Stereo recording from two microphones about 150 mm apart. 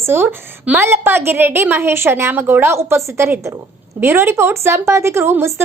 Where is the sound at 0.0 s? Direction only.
15° right (ahead or behind).